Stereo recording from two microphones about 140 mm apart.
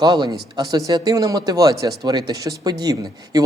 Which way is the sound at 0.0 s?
30° right (ahead or behind).